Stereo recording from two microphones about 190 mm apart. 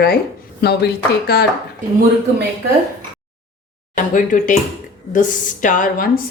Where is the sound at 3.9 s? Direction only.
45° left (ahead or behind).